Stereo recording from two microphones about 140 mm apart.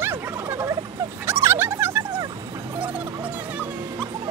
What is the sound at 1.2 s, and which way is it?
Turkey, 20° right (ahead or behind).